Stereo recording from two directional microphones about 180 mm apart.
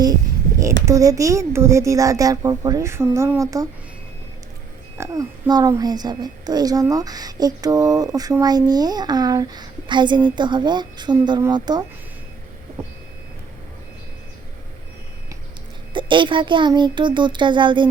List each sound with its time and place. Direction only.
0.9 s speech: 20° right (ahead or behind)
4.9 s a child's voice: 20° right (ahead or behind)
15.9 s a child's voice: 25° right (ahead or behind)